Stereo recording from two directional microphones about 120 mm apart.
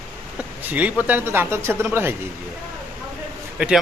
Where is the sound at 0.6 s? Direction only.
15° right (ahead or behind).